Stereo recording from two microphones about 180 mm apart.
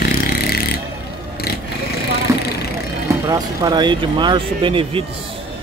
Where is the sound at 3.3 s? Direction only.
20° right (ahead or behind).